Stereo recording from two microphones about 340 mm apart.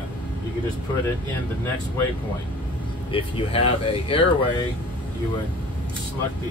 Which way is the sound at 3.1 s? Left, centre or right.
Centre.